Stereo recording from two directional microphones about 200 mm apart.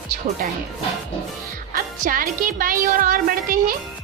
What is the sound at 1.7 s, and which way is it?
Speech, 45° right (ahead or behind).